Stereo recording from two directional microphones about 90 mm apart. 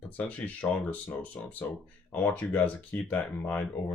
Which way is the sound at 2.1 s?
15° left (ahead or behind).